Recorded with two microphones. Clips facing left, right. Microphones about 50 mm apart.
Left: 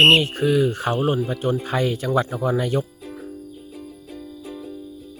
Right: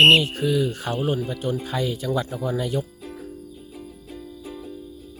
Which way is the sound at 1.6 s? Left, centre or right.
Left.